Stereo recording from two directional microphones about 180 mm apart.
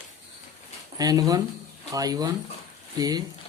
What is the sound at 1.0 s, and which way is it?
Speech, 20° right (ahead or behind).